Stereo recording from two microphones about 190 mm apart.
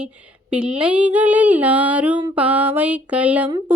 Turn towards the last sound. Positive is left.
turn(degrees=-25)  # may be behind; listen again after turning